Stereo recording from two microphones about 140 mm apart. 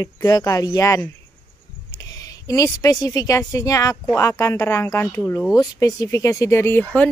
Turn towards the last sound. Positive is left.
turn(degrees=15)  # may be behind; listen again after turning